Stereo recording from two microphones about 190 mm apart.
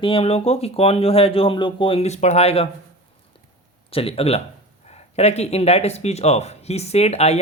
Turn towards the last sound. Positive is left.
turn(degrees=35)  # may be behind; listen again after turning